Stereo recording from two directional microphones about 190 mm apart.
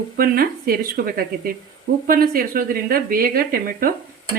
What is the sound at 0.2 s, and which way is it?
Speech, 50° right (ahead or behind).